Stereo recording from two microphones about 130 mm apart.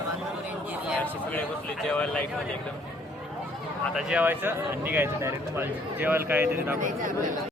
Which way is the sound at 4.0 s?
5° right (ahead or behind).